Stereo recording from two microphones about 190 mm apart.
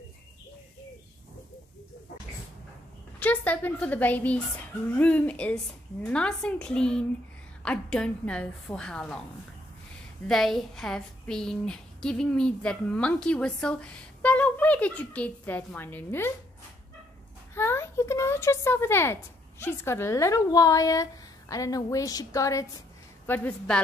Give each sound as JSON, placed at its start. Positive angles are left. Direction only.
{"t": 3.2, "sound": "a woman's voice", "side_deg": 5}
{"t": 10.2, "sound": "speech", "side_deg": 0}
{"t": 17.6, "sound": "a woman's voice", "side_deg": 15}